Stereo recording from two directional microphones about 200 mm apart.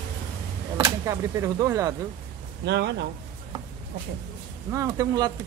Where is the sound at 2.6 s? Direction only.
60° right (ahead or behind).